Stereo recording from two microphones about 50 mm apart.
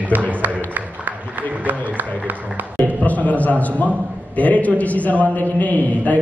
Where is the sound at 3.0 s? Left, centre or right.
Left.